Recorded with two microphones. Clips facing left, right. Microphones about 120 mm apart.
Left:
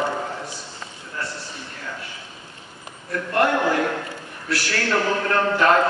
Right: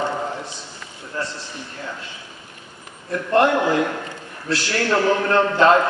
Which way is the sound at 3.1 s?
25° right (ahead or behind).